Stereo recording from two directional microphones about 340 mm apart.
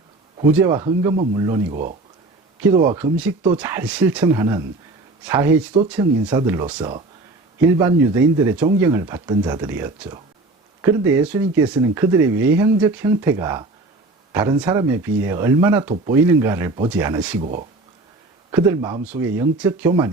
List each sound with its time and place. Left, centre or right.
0.6 s speech: centre
1.7 s speech: right; by 17.3 s centre
18.5 s speech: centre